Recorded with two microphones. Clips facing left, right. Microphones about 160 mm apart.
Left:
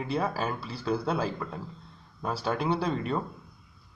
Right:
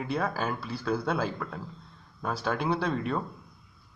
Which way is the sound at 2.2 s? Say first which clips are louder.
Even; 30° left (ahead or behind).